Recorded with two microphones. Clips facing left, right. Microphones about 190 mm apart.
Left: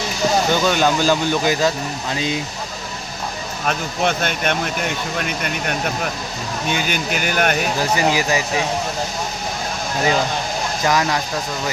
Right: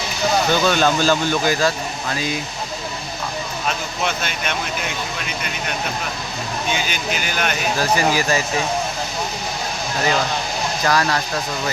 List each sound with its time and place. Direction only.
0.5 s speech: 15° left (ahead or behind)
3.7 s speech: 55° left (ahead or behind)
7.8 s speech: 15° left (ahead or behind)
10.8 s speech: 20° left (ahead or behind)